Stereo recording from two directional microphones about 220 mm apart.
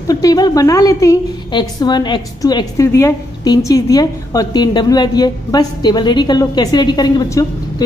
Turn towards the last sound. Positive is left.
turn(degrees=15)  # may be behind; listen again after turning